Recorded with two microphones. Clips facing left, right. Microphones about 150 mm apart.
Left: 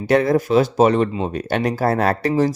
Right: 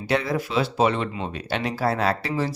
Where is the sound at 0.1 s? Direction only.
50° left (ahead or behind).